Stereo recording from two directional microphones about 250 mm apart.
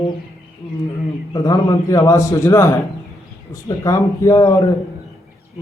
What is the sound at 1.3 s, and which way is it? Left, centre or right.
A man's voice, centre.